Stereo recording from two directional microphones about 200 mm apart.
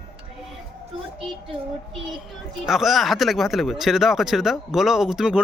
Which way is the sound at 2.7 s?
Centre (ahead or behind).